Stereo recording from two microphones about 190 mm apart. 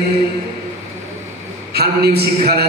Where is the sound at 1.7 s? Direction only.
55° right (ahead or behind).